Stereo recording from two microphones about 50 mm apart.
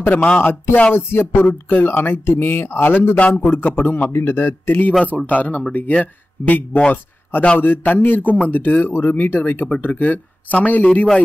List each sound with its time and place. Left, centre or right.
0.0 s speech: left
3.2 s speech: left
3.4 s speech: left
4.1 s speech: left
5.0 s speech: left